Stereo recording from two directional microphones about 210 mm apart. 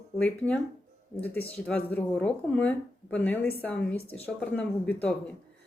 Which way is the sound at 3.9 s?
25° left (ahead or behind).